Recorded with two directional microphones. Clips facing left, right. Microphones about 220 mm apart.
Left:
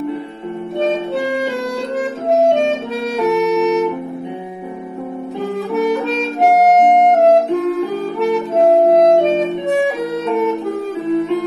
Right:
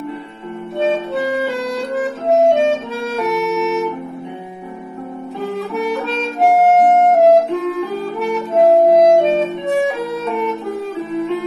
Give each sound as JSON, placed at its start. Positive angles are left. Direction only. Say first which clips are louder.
{"t": 7.0, "sound": "music", "louder": "even", "side_deg": 0}
{"t": 8.5, "sound": "music", "louder": "right 1 dB", "side_deg": 0}